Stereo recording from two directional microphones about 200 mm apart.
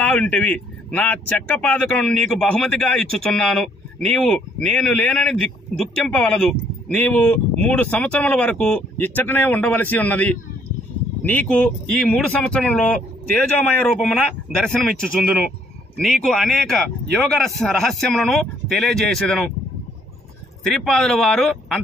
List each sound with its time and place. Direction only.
0.0 s speech: 5° left (ahead or behind)
14.0 s speech: 5° left (ahead or behind)
20.6 s speech: centre (ahead or behind)